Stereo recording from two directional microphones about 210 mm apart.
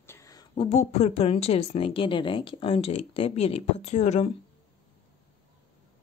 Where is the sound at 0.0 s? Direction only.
15° left (ahead or behind).